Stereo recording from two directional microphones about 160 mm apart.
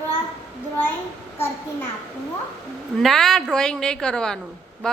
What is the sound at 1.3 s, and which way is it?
Speech, 15° left (ahead or behind).